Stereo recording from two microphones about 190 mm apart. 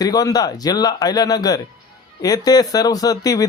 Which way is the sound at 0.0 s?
20° left (ahead or behind).